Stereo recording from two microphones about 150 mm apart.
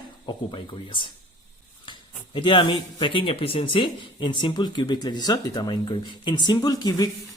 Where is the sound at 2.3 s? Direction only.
30° left (ahead or behind).